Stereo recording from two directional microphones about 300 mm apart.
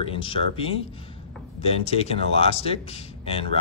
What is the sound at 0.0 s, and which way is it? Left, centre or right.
Speech, centre.